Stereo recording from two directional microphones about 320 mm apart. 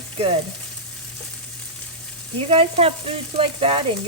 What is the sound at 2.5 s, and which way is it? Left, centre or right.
Speech, centre.